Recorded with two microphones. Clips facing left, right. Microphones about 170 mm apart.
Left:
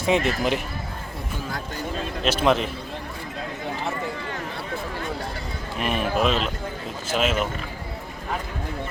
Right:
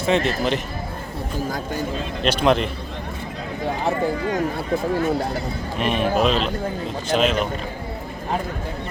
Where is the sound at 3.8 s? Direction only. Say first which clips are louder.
Right 8 dB; 40° right (ahead or behind).